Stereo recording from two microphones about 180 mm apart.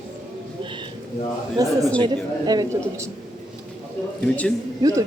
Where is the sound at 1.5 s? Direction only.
20° right (ahead or behind).